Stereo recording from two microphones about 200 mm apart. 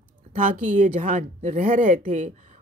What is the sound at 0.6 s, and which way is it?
Speech, 40° right (ahead or behind).